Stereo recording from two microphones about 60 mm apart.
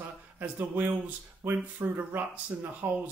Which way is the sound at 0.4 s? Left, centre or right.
Right.